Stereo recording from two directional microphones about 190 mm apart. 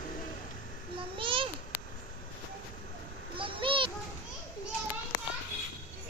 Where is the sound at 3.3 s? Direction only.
25° right (ahead or behind).